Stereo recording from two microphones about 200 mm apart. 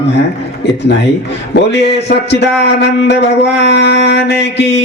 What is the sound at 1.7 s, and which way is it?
A man's voice, 55° left (ahead or behind).